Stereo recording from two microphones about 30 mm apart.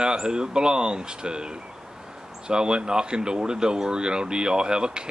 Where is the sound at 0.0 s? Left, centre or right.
Right.